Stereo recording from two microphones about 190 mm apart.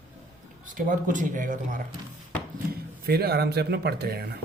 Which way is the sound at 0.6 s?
45° right (ahead or behind).